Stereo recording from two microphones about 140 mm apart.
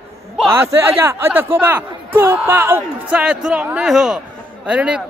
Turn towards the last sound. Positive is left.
turn(degrees=-10)  # may be behind; listen again after turning